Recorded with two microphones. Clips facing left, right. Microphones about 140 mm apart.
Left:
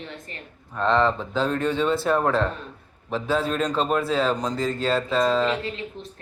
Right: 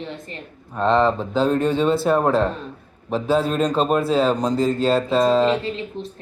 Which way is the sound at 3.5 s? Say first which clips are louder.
Right 4 dB; 25° right (ahead or behind).